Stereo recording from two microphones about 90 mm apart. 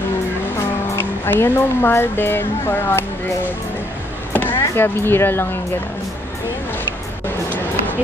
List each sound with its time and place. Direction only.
0.6 s speech: 25° left (ahead or behind)
4.3 s chop: 20° left (ahead or behind)
4.7 s speech: 25° left (ahead or behind)